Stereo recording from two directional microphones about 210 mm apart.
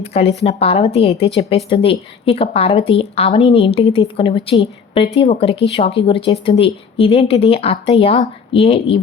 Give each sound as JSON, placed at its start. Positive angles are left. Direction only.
{"t": 0.0, "sound": "speech", "side_deg": 30}